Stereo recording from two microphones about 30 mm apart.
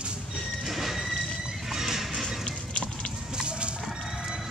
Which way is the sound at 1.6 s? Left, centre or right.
Centre.